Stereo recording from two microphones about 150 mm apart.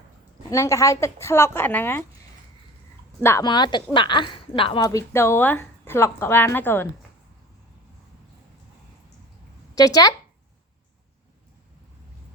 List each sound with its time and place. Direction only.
0.5 s speech: 20° left (ahead or behind)
3.2 s speech: 15° left (ahead or behind)
3.4 s speech: 30° left (ahead or behind)
4.9 s speech: 20° left (ahead or behind)
9.7 s speech: 25° left (ahead or behind)